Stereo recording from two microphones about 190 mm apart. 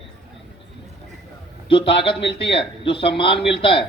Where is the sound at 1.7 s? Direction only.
30° left (ahead or behind).